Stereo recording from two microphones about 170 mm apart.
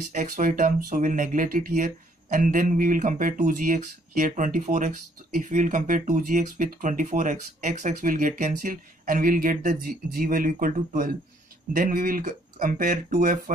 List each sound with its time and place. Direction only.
0.1 s speech: 50° right (ahead or behind)